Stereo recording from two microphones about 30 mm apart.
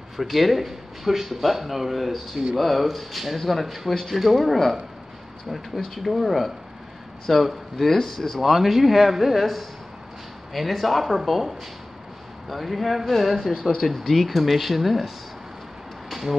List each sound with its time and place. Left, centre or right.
0.2 s speech: centre
6.0 s speech: centre